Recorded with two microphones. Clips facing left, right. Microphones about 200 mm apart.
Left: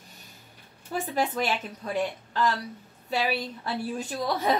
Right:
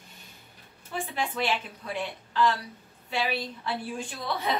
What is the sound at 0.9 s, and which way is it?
A woman's voice, 40° left (ahead or behind).